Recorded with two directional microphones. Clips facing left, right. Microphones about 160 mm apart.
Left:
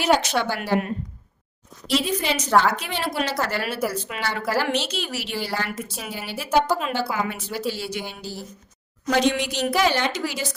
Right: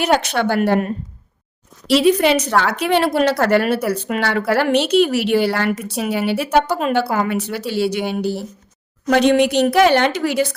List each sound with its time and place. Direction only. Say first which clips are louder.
0.0 s a woman's voice: right 3 dB; 60° right (ahead or behind)
1.9 s a woman's voice: right 10 dB; 75° right (ahead or behind)